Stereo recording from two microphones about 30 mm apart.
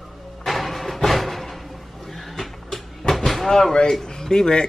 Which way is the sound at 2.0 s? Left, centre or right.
Centre.